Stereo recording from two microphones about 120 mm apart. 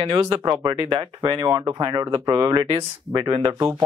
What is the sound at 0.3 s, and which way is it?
Speech, 35° right (ahead or behind).